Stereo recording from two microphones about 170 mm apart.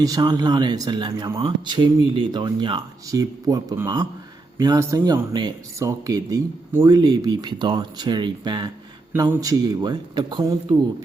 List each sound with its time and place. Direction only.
0.0 s speech: 25° right (ahead or behind)